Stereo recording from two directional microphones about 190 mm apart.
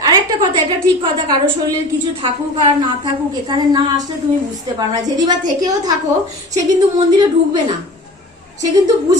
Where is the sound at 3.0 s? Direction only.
20° right (ahead or behind).